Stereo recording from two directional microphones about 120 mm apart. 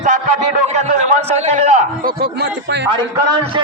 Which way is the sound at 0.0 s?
90° right.